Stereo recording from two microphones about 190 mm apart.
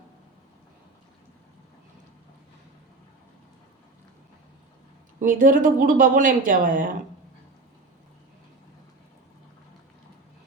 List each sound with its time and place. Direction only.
5.2 s a woman's voice: 45° right (ahead or behind)